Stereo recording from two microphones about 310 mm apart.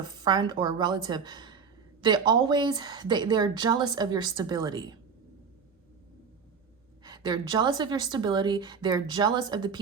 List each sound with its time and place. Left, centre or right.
0.0 s speech: centre
7.0 s speech: centre